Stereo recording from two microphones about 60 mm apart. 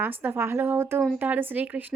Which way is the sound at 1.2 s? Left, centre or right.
Right.